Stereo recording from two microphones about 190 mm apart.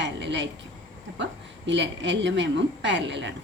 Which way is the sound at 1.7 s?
70° right (ahead or behind).